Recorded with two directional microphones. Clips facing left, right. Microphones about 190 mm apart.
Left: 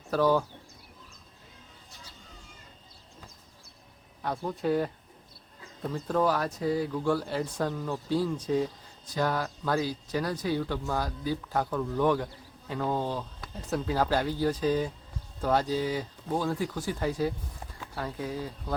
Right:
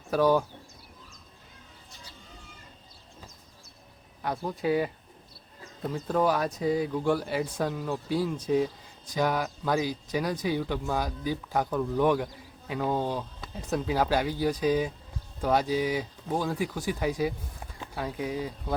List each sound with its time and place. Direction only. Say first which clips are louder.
0.1 s speech: right 1 dB; 15° right (ahead or behind)
4.2 s speech: right 1 dB; 5° right (ahead or behind)